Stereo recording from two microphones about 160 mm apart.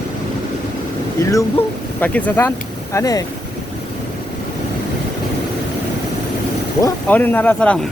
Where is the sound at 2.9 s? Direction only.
20° left (ahead or behind).